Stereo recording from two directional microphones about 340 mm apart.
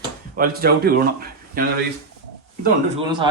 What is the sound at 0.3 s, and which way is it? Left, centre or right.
Speech, right.